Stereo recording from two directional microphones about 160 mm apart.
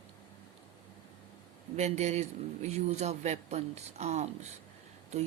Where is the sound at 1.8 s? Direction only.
45° right (ahead or behind).